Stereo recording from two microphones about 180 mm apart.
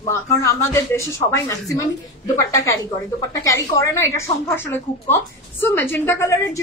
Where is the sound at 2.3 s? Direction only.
20° left (ahead or behind).